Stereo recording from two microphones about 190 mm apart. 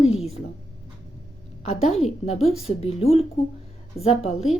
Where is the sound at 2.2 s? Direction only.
30° left (ahead or behind).